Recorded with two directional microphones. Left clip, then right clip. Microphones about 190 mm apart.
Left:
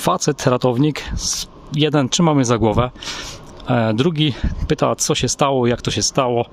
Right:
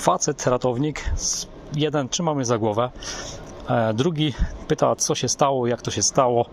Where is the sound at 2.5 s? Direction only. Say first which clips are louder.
Left 4 dB; 35° left (ahead or behind).